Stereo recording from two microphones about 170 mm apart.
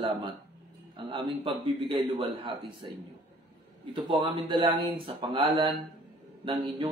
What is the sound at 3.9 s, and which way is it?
A man's voice, 30° right (ahead or behind).